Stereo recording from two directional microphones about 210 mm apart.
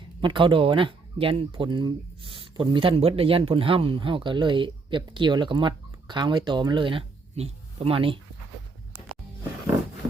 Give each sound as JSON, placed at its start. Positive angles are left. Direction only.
{"t": 0.2, "sound": "speech", "side_deg": -25}